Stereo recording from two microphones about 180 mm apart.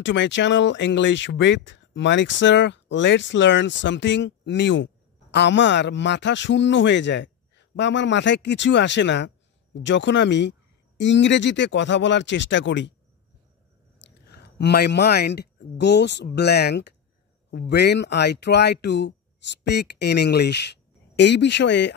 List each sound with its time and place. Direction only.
0.0 s speech: 85° left
14.2 s speech: 65° left (ahead or behind)